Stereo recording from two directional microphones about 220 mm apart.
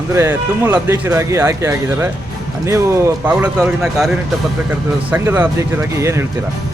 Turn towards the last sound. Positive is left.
turn(degrees=-10)  # may be behind; listen again after turning